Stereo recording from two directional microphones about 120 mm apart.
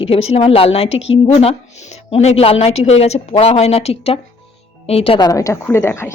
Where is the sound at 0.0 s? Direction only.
55° left (ahead or behind).